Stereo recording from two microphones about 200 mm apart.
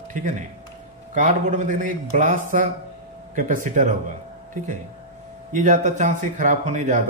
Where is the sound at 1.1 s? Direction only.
40° right (ahead or behind).